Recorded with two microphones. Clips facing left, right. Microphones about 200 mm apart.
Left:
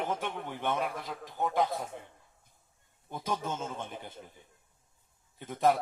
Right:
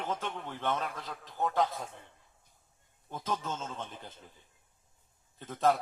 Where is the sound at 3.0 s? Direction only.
10° left (ahead or behind).